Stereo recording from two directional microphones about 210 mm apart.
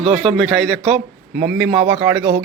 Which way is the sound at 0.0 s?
25° right (ahead or behind).